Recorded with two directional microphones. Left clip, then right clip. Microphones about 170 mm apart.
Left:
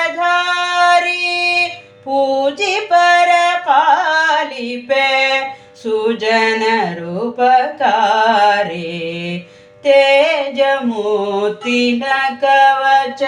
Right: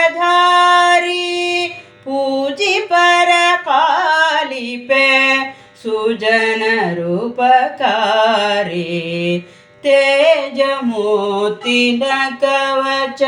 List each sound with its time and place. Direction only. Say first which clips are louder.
0.2 s female singing: right 4 dB; 20° right (ahead or behind)
2.3 s music: even; 15° right (ahead or behind)
4.9 s a sound: right 2 dB; 20° right (ahead or behind)
6.0 s mantra: even; 15° right (ahead or behind)
9.8 s music: left 2 dB; 15° right (ahead or behind)
11.1 s a sound: even; 35° right (ahead or behind)